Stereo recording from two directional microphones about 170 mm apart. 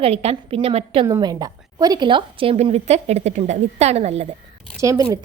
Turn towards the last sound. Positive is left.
turn(degrees=-20)  # may be behind; listen again after turning